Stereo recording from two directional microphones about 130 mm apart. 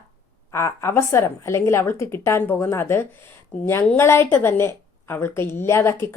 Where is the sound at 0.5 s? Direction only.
20° left (ahead or behind).